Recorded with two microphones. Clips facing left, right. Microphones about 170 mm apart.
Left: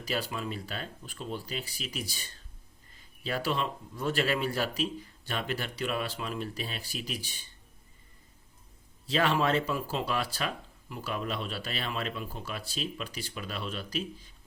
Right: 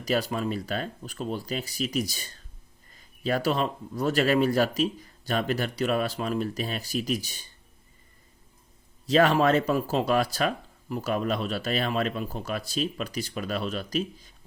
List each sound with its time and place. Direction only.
0.0 s speech: 40° right (ahead or behind)
3.2 s speech: 45° right (ahead or behind)
9.0 s speech: 45° right (ahead or behind)